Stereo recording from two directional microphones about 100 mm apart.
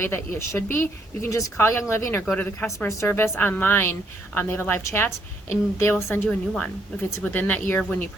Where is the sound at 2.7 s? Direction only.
30° left (ahead or behind).